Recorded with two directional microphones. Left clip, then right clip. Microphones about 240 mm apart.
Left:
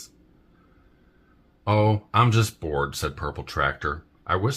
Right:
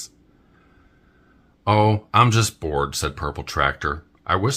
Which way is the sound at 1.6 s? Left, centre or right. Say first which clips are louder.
Right 4 dB; right.